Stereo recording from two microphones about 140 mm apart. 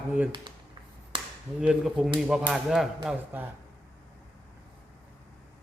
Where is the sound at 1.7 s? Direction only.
5° right (ahead or behind).